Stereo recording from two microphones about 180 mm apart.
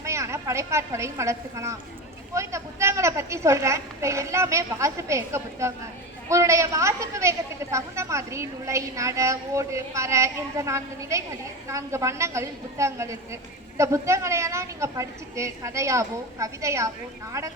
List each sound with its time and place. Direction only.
0.0 s a woman's voice: 15° right (ahead or behind)